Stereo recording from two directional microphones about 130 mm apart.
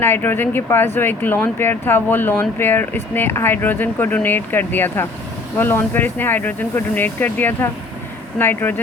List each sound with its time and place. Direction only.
0.0 s speech: 15° left (ahead or behind)